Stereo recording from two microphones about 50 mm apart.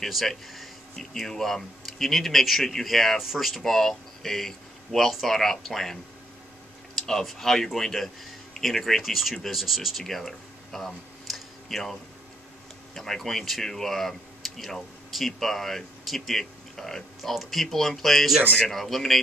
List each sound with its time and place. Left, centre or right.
0.0 s speech: centre
7.0 s speech: centre
10.0 s a sound: centre
12.9 s speech: centre